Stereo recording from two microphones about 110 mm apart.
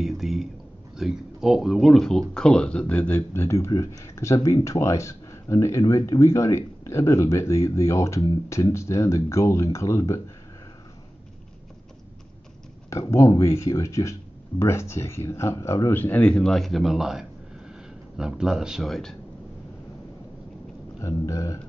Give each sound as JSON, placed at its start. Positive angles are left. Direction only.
{"t": 0.0, "sound": "a sound", "side_deg": 0}
{"t": 0.9, "sound": "speech", "side_deg": -5}
{"t": 12.9, "sound": "speech", "side_deg": 30}
{"t": 21.0, "sound": "speech", "side_deg": 30}